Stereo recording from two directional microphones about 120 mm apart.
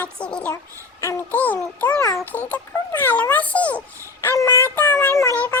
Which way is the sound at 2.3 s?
15° left (ahead or behind).